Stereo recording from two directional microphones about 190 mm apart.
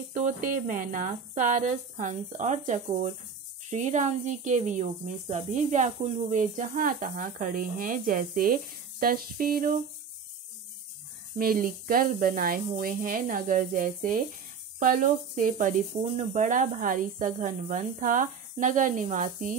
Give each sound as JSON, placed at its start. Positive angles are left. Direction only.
{"t": 0.1, "sound": "speech", "side_deg": -40}
{"t": 11.3, "sound": "speech", "side_deg": -50}